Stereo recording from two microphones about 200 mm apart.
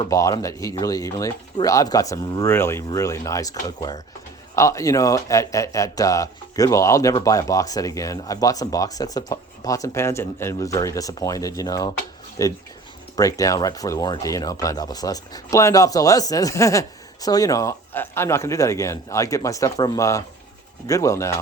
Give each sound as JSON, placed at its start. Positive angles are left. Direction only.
{"t": 0.1, "sound": "a man's voice", "side_deg": 15}